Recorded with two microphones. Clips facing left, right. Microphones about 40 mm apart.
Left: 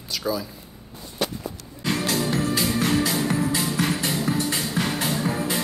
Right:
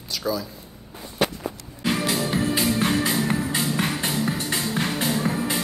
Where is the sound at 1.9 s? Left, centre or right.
Centre.